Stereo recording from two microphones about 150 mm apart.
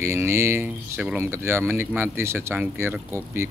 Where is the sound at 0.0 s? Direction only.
15° right (ahead or behind).